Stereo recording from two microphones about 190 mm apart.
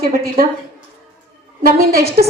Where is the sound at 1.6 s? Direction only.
55° right (ahead or behind).